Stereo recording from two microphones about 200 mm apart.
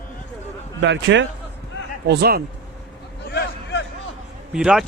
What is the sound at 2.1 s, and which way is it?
Speech, 50° right (ahead or behind).